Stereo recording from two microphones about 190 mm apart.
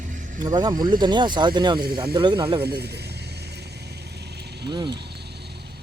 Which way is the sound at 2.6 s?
60° right (ahead or behind).